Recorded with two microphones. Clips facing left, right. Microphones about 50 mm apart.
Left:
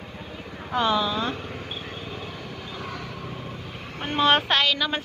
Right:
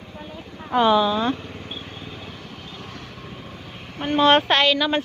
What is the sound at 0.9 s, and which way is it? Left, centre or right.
Speech, right.